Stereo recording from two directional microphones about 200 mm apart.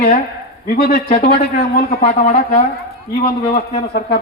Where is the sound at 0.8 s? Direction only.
50° left (ahead or behind).